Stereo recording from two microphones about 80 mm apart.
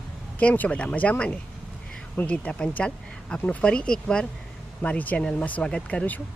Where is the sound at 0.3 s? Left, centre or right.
Centre.